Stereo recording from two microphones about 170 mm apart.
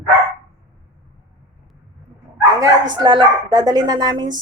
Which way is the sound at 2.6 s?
25° right (ahead or behind).